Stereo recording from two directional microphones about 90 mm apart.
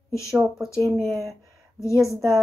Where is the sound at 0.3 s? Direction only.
5° right (ahead or behind).